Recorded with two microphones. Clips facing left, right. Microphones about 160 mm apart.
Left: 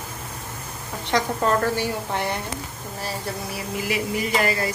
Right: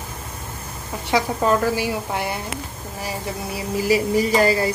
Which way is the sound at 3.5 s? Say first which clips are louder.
Right 9 dB; 35° right (ahead or behind).